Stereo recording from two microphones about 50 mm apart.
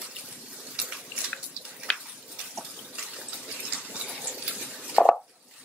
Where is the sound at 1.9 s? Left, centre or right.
Left.